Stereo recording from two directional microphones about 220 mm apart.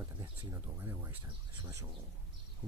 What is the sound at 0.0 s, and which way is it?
Speech, 10° right (ahead or behind).